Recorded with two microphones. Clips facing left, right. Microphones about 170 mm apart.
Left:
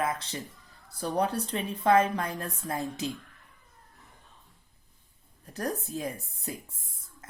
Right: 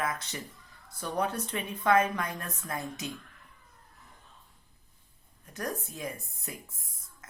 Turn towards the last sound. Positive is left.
turn(degrees=30)  # may be behind; listen again after turning